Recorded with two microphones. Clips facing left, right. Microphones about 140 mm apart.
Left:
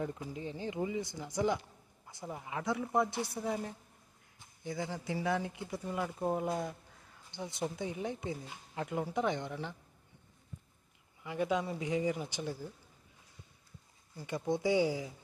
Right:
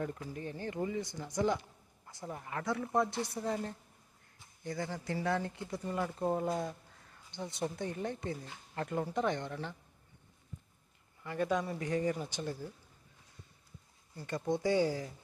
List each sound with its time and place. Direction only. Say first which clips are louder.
0.0 s speech: even; 15° left (ahead or behind)
2.0 s speech: even; 10° left (ahead or behind)
11.2 s speech: even; 10° left (ahead or behind)
14.2 s speech: even; 10° left (ahead or behind)